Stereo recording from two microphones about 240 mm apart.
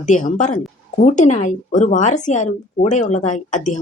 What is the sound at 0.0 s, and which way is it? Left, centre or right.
Speech, left.